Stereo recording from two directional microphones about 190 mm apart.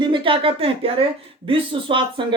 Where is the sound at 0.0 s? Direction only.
25° right (ahead or behind).